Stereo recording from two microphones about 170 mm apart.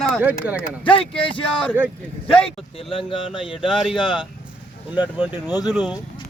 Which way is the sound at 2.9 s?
30° left (ahead or behind).